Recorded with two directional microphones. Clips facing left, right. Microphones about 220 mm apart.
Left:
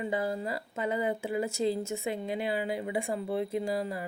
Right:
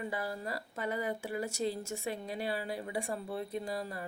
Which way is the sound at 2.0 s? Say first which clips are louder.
Left 5 dB; 90° left.